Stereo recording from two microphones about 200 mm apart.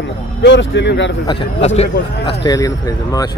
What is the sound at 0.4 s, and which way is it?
Speech, 65° left (ahead or behind).